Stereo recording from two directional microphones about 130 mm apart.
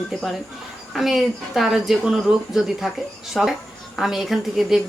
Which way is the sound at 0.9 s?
Centre (ahead or behind).